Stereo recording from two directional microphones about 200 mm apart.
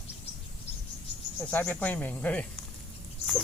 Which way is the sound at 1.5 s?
10° left (ahead or behind).